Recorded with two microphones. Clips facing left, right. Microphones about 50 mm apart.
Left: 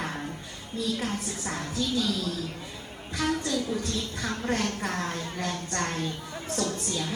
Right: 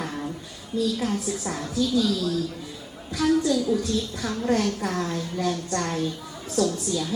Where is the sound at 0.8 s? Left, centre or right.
Left.